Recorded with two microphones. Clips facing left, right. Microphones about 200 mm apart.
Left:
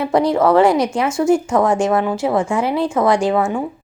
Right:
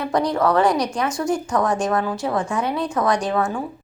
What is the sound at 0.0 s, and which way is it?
A woman's voice, 25° left (ahead or behind).